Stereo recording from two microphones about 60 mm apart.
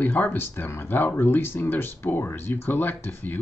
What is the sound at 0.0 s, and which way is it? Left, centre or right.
Speech, left.